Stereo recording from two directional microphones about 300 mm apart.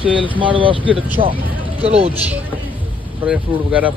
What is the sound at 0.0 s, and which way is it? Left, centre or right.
Speech, centre.